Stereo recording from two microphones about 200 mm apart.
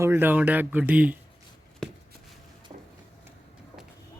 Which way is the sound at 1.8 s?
5° left (ahead or behind).